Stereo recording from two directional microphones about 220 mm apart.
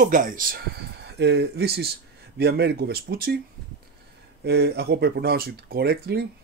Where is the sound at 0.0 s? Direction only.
40° right (ahead or behind).